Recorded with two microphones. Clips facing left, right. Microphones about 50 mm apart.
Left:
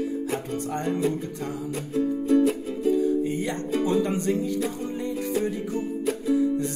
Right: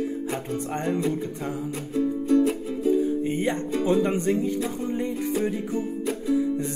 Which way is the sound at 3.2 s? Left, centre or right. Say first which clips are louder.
Right 2 dB; right.